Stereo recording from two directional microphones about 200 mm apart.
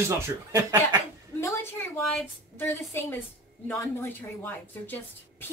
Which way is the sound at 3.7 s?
10° left (ahead or behind).